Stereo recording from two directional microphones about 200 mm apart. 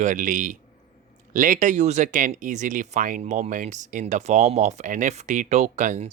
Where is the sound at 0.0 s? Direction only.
40° right (ahead or behind).